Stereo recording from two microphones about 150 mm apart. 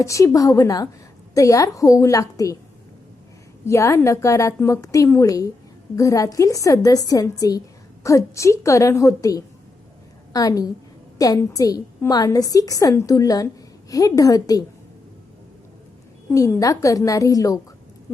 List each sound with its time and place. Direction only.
0.0 s a woman's voice: 20° left (ahead or behind)
3.7 s a woman's voice: 20° left (ahead or behind)
16.3 s a woman's voice: 20° left (ahead or behind)